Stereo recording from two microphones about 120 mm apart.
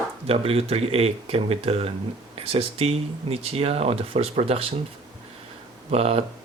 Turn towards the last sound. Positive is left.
turn(degrees=-55)  # may be behind; listen again after turning